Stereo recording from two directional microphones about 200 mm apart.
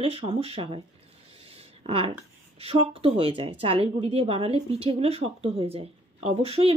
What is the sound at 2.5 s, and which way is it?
A woman's voice, 30° right (ahead or behind).